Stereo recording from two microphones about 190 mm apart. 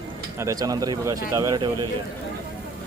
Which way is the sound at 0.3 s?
15° right (ahead or behind).